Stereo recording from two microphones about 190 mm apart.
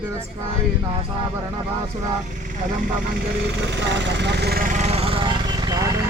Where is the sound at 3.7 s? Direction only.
70° right (ahead or behind); by 5.9 s 20° right (ahead or behind).